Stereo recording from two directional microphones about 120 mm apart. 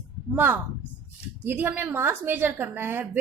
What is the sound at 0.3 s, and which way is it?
A woman's voice, 15° right (ahead or behind).